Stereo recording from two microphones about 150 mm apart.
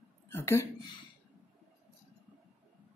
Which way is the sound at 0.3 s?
15° left (ahead or behind).